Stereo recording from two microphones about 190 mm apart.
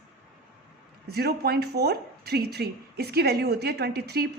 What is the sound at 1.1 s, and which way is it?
A woman's voice, 55° right (ahead or behind).